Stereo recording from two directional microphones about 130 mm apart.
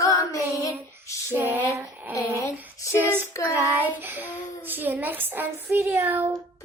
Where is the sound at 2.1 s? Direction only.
25° left (ahead or behind).